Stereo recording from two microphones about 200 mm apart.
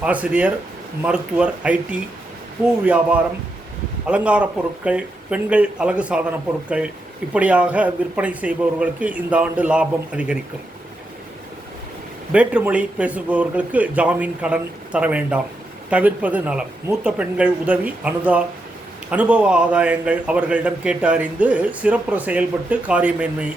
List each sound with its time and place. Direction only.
0.0 s a man's voice: 5° right (ahead or behind)
12.3 s a man's voice: 5° right (ahead or behind)